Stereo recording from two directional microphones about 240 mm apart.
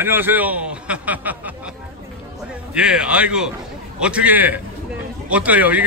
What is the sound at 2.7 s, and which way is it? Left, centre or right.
A man's voice, centre.